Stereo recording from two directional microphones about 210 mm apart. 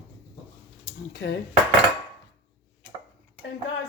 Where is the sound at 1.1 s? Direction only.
55° left (ahead or behind).